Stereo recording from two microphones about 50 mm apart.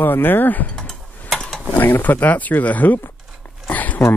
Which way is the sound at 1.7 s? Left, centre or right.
Left.